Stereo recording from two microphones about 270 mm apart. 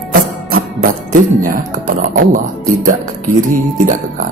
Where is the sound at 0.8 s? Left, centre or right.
Right.